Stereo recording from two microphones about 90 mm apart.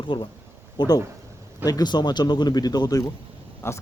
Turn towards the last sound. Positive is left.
turn(degrees=30)  # may be behind; listen again after turning